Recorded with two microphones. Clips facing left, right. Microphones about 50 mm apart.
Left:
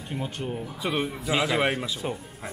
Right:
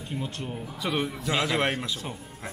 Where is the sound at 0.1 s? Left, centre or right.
Centre.